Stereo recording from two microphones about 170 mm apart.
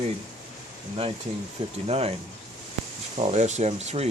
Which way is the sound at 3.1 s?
40° right (ahead or behind).